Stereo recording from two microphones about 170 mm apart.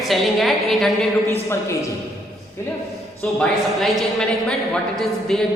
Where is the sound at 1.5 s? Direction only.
15° left (ahead or behind).